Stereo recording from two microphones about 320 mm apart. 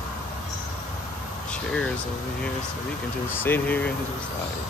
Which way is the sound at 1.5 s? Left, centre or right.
Centre.